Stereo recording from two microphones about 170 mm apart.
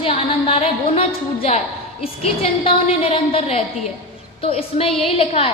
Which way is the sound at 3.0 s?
35° left (ahead or behind).